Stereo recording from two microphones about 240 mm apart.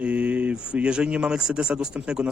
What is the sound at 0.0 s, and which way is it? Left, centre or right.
Speech, centre.